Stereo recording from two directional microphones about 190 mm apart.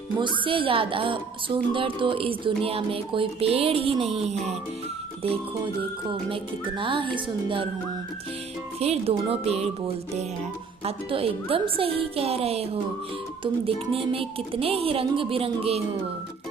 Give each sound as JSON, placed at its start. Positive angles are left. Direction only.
{"t": 0.2, "sound": "a woman's voice", "side_deg": -25}
{"t": 8.8, "sound": "a woman's voice", "side_deg": -30}